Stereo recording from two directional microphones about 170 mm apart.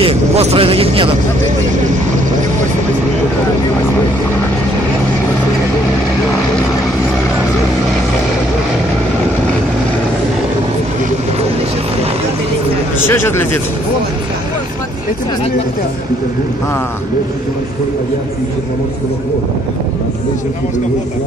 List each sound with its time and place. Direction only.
0.0 s speech: 35° right (ahead or behind)
13.0 s speech: 15° left (ahead or behind)